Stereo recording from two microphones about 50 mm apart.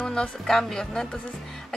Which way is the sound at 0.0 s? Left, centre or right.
Centre.